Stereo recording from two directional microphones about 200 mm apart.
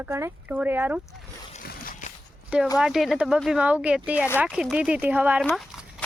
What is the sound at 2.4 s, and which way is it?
Speech, 5° right (ahead or behind).